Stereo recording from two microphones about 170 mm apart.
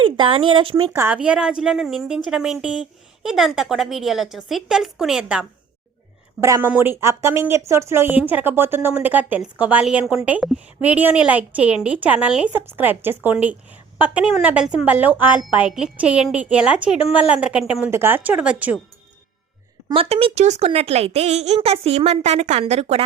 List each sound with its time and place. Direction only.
0.0 s speech: 30° right (ahead or behind)
0.9 s a woman's voice: 10° right (ahead or behind)
19.9 s speech: 35° right (ahead or behind)